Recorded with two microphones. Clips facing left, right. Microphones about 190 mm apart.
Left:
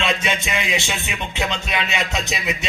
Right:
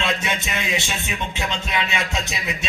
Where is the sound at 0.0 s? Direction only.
20° left (ahead or behind).